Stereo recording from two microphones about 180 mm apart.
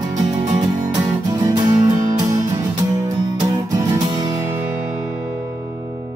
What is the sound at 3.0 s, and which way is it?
Music, 20° right (ahead or behind).